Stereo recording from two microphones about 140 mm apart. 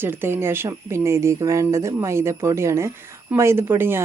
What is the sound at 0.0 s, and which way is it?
A woman's voice, 15° right (ahead or behind).